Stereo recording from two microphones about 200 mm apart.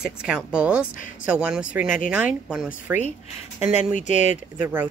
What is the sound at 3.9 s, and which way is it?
Speech, 35° left (ahead or behind).